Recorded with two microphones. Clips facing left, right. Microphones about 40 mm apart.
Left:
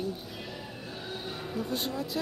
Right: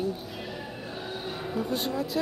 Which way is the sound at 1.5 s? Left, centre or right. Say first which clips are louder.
Right 4 dB; centre.